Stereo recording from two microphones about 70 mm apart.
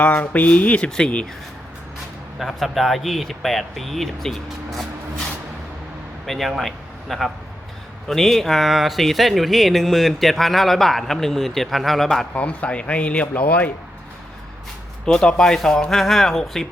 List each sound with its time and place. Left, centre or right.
0.0 s speech: left
2.4 s speech: centre
6.2 s speech: centre
12.3 s speech: centre
15.0 s speech: centre